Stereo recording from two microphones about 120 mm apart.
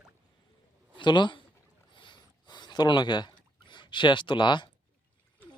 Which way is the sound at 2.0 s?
40° left (ahead or behind).